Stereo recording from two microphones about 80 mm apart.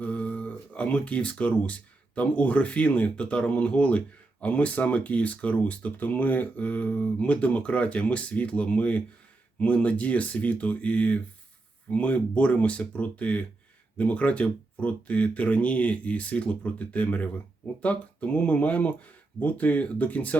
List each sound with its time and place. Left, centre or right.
0.0 s speech: centre